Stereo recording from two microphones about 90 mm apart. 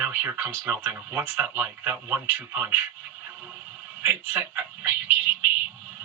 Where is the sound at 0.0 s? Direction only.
25° right (ahead or behind).